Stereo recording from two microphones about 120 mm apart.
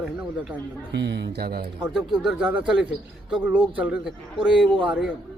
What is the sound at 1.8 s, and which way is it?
A man's voice, 5° right (ahead or behind).